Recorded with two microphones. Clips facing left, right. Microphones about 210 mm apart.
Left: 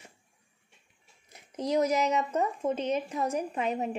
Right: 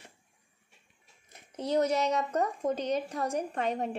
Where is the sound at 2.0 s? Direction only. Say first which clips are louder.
Left 1 dB; 5° left (ahead or behind).